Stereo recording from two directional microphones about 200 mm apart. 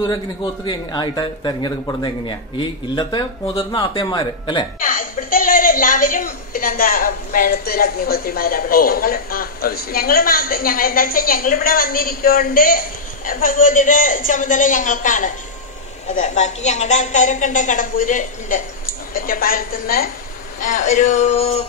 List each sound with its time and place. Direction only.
0.7 s speech: 20° left (ahead or behind)
4.7 s a woman's voice: 40° left (ahead or behind)
20.6 s a woman's voice: 35° left (ahead or behind)